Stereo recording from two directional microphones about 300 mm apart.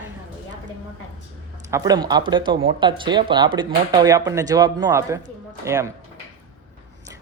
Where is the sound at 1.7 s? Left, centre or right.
Centre.